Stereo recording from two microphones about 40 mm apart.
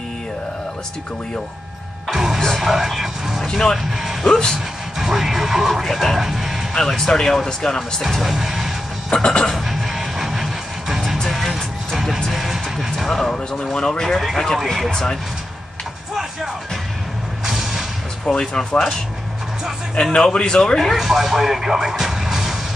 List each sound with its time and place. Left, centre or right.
2.0 s music: centre
2.5 s speech: centre
3.4 s speech: centre
4.0 s speech: centre
6.7 s speech: centre
8.0 s music: centre
9.1 s speech: centre
9.7 s music: centre
13.0 s speech: centre
17.5 s music: centre
18.2 s speech: left
20.0 s speech: left
20.9 s speech: centre